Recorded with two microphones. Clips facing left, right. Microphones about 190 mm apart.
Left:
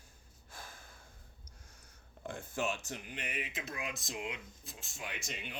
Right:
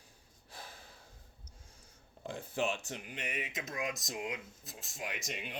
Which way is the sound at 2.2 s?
50° left (ahead or behind).